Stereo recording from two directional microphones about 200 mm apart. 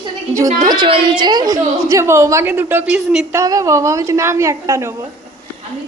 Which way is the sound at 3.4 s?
15° right (ahead or behind).